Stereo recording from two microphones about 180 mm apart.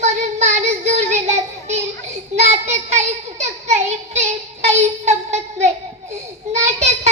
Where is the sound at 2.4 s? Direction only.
40° right (ahead or behind).